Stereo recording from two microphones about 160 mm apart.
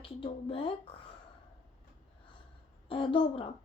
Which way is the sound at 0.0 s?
35° left (ahead or behind).